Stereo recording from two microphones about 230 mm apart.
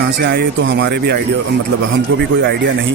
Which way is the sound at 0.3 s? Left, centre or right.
Right.